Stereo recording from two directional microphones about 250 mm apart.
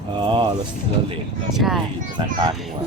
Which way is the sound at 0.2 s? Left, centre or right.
Centre.